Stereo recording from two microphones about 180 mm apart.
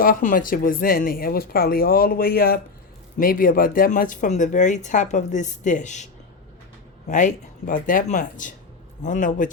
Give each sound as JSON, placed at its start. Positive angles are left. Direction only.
{"t": 0.0, "sound": "speech", "side_deg": 50}
{"t": 7.1, "sound": "speech", "side_deg": 45}